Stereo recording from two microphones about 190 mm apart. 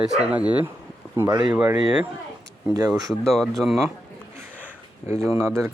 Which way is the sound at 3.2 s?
Centre (ahead or behind).